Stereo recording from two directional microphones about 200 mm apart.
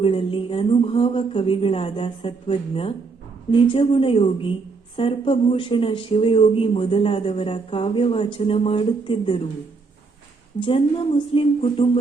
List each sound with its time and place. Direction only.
0.0 s speech: 25° left (ahead or behind)
10.6 s speech: 25° left (ahead or behind)